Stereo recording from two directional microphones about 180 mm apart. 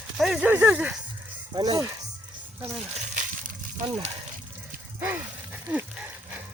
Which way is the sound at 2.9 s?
45° right (ahead or behind).